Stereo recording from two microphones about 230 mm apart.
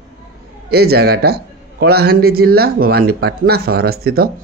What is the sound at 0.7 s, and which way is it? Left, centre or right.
Speech, right.